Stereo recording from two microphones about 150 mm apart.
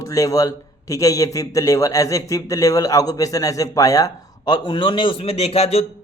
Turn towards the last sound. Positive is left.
turn(degrees=45)  # may be behind; listen again after turning